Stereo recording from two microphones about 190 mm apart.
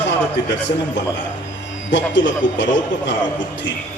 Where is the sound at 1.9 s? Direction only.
75° left (ahead or behind).